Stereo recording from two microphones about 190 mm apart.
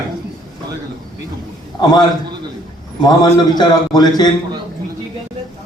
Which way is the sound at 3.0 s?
20° left (ahead or behind).